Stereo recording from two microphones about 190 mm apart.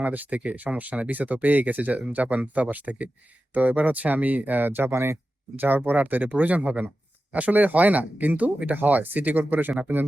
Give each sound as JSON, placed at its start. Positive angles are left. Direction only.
{"t": 0.0, "sound": "speech", "side_deg": -10}